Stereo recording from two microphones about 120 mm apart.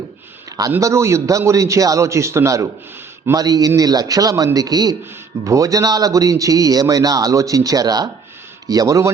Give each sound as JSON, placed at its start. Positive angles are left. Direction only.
{"t": 0.8, "sound": "a man's voice", "side_deg": -25}